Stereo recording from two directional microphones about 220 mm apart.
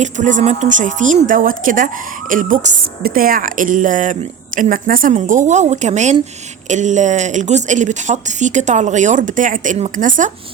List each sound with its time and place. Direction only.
0.0 s speech: 35° right (ahead or behind)